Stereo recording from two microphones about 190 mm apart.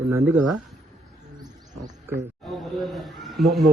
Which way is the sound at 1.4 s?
20° right (ahead or behind).